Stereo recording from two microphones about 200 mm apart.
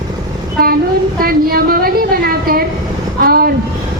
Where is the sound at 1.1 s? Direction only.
50° right (ahead or behind).